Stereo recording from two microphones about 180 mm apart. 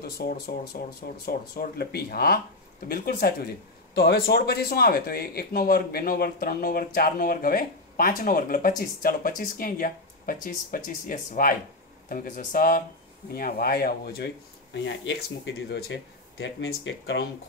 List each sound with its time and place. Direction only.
0.0 s speech: 55° left (ahead or behind); by 17.2 s 70° left (ahead or behind)